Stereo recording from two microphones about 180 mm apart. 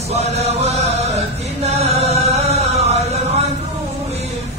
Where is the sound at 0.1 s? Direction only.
35° right (ahead or behind).